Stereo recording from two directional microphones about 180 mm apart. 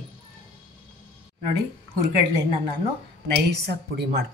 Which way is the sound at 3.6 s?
65° right (ahead or behind).